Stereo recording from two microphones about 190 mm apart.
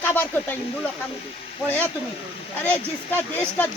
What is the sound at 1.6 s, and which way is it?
Speech, 10° left (ahead or behind).